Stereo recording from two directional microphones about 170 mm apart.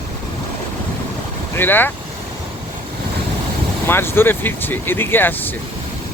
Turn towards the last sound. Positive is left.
turn(degrees=10)  # may be behind; listen again after turning